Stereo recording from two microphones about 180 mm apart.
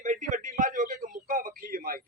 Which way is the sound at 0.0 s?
45° right (ahead or behind).